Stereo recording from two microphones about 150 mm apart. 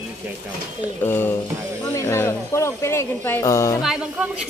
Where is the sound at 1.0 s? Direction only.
15° left (ahead or behind).